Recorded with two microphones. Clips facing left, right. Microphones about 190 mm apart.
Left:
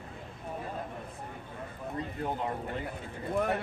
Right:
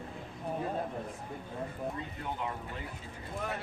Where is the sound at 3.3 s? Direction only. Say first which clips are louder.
Left 8 dB; 60° left (ahead or behind).